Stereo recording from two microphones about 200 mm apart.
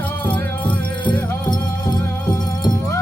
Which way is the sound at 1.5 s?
20° left (ahead or behind).